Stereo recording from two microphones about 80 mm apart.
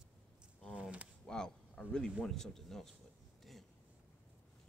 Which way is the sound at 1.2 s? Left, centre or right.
Centre.